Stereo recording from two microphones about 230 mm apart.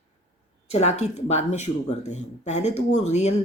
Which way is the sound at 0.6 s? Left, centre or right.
Left.